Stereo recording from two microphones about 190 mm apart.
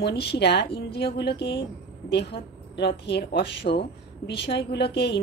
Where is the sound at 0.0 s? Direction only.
60° left (ahead or behind).